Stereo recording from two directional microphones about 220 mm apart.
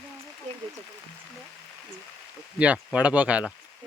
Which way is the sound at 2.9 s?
5° right (ahead or behind).